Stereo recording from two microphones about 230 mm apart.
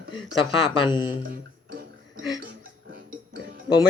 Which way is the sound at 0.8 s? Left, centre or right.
Centre.